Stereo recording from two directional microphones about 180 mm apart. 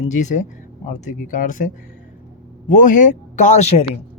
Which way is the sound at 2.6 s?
45° left (ahead or behind).